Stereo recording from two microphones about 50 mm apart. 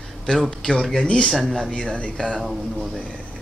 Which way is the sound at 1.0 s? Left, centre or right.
Left.